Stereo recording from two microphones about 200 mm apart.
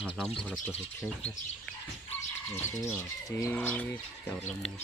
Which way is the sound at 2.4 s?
10° left (ahead or behind).